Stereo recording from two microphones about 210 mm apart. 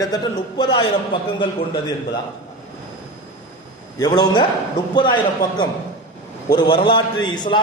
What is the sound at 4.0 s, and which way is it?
A man's voice, 20° left (ahead or behind).